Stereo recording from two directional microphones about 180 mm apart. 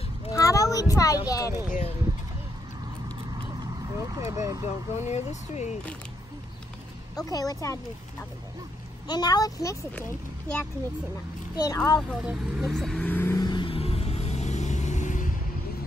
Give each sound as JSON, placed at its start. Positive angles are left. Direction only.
{"t": 0.3, "sound": "a sound", "side_deg": 20}
{"t": 1.7, "sound": "speech", "side_deg": 40}
{"t": 3.9, "sound": "speech", "side_deg": -15}
{"t": 5.1, "sound": "speech", "side_deg": 40}
{"t": 7.2, "sound": "speech", "side_deg": 20}
{"t": 11.5, "sound": "speech", "side_deg": 20}
{"t": 12.1, "sound": "vehicle", "side_deg": -5}